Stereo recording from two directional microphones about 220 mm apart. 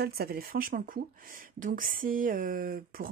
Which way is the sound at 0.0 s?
45° right (ahead or behind).